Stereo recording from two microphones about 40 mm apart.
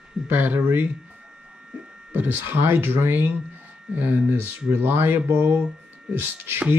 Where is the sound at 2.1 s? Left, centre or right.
Right.